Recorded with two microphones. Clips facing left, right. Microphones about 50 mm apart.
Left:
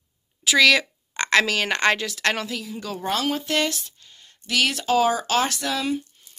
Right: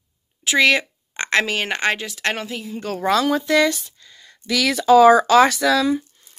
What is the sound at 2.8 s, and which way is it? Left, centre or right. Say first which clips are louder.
Speech: right 5 dB; right.